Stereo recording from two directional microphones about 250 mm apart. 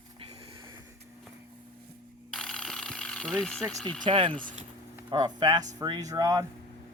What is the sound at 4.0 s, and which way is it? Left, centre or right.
Speech, right.